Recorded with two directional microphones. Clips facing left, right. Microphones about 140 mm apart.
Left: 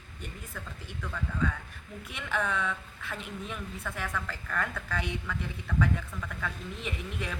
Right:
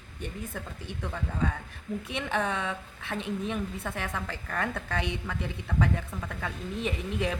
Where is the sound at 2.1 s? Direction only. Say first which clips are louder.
Right 2 dB; 25° right (ahead or behind).